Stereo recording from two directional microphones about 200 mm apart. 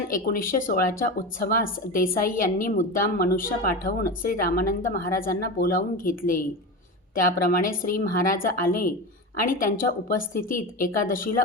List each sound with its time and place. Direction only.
0.1 s speech: 45° left (ahead or behind)
7.4 s speech: 45° left (ahead or behind)